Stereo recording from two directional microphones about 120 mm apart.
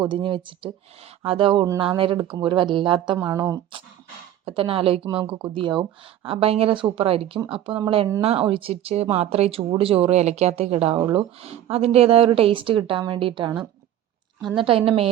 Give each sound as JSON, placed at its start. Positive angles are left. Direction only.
{"t": 0.0, "sound": "speech", "side_deg": -40}
{"t": 4.4, "sound": "speech", "side_deg": -50}
{"t": 6.2, "sound": "speech", "side_deg": -55}